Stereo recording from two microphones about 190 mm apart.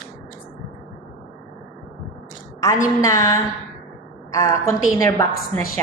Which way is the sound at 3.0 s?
15° left (ahead or behind).